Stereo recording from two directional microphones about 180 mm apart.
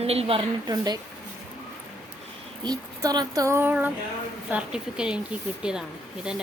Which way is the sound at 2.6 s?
20° right (ahead or behind).